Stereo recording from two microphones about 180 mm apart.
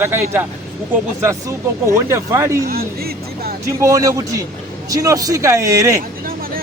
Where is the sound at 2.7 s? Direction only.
60° right (ahead or behind).